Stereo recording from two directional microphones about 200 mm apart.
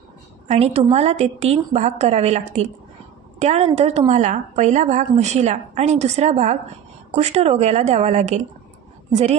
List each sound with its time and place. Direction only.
0.5 s a woman's voice: 30° right (ahead or behind)